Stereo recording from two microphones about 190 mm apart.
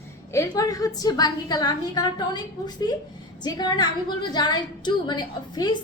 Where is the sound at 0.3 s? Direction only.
20° left (ahead or behind).